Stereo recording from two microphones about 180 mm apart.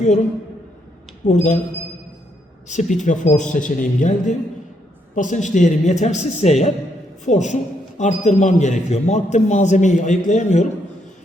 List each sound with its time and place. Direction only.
1.3 s a man's voice: 40° left (ahead or behind)
2.6 s a man's voice: 40° left (ahead or behind)